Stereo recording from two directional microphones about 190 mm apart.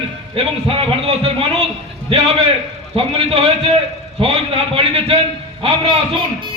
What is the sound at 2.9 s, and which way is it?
A man's voice, 30° right (ahead or behind).